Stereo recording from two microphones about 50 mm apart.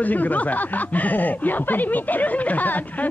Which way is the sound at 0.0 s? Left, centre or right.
Left.